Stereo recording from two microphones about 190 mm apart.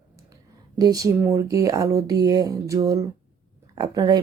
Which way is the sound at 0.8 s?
20° right (ahead or behind).